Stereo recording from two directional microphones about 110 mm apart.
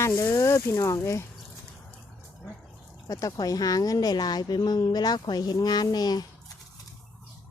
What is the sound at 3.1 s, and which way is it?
A woman's voice, 35° left (ahead or behind).